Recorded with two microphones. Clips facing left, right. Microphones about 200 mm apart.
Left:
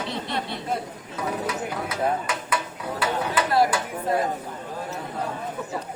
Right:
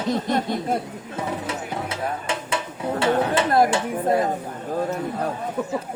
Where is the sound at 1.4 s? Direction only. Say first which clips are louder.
Even; 25° right (ahead or behind).